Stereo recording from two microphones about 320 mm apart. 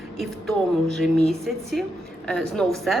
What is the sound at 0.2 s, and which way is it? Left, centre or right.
A woman's voice, centre.